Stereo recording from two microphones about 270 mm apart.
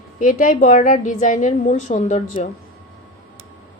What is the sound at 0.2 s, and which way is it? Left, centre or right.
A woman's voice, left.